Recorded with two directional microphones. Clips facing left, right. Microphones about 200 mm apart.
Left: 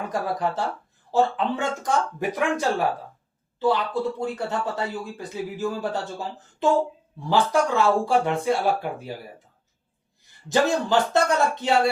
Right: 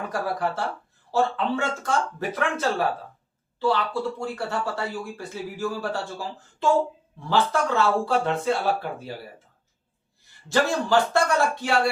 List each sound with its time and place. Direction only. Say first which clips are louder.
0.1 s speech: left 1 dB; 20° left (ahead or behind)
10.5 s speech: left 1 dB; 20° left (ahead or behind)